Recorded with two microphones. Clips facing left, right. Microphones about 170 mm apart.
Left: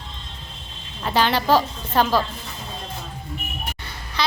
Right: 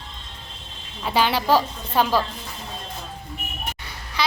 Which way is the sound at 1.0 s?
10° right (ahead or behind).